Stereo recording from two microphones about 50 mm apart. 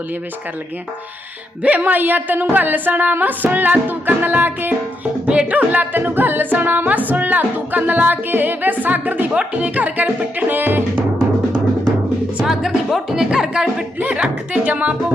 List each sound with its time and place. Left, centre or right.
1.6 s music: right
5.2 s music: right
5.5 s music: right
12.4 s speech: centre
14.0 s speech: right